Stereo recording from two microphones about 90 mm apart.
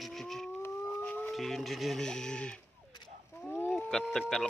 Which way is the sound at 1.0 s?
15° left (ahead or behind).